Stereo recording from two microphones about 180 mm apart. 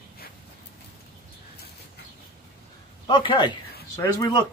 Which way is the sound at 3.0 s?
25° left (ahead or behind).